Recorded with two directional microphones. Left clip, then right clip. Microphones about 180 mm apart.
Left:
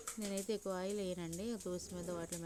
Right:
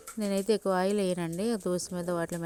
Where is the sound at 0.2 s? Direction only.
45° right (ahead or behind).